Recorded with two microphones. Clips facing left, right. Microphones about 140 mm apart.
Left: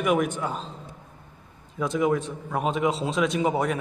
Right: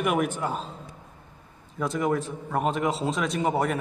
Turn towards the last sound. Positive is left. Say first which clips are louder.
# left 1 dB
turn(degrees=0)  # may be behind; listen again after turning